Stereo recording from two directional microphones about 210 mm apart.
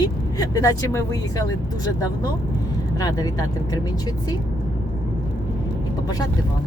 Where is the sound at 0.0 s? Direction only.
15° left (ahead or behind).